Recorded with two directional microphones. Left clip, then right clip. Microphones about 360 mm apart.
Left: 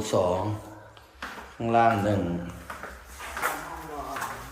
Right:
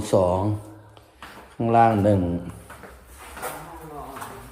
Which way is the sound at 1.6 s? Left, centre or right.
Centre.